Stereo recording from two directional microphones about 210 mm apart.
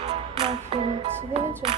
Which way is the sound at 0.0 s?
25° right (ahead or behind).